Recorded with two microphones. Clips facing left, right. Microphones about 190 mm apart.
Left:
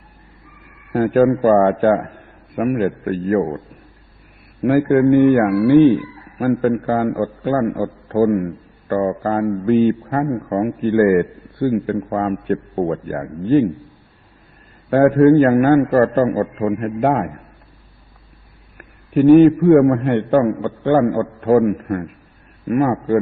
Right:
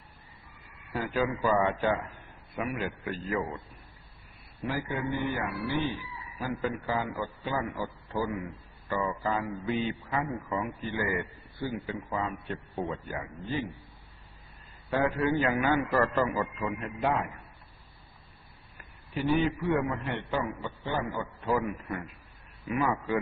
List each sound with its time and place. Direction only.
0.9 s a man's voice: 50° left (ahead or behind)
4.6 s a man's voice: 65° left (ahead or behind)
14.8 s a man's voice: 55° left (ahead or behind)
18.8 s a man's voice: 60° left (ahead or behind)